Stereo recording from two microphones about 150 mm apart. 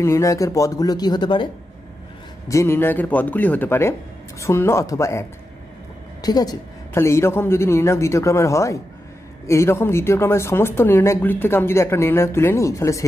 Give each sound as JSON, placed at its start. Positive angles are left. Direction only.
{"t": 0.0, "sound": "speech", "side_deg": 20}
{"t": 2.4, "sound": "speech", "side_deg": 20}
{"t": 6.2, "sound": "speech", "side_deg": 25}